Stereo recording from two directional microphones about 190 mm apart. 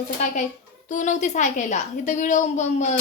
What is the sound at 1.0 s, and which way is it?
A woman's voice, 40° left (ahead or behind).